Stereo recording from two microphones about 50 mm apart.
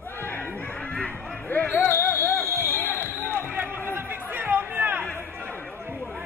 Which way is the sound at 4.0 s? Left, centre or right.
Right.